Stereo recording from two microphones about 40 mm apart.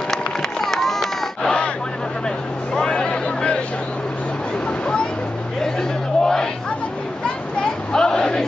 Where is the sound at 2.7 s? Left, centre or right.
Left.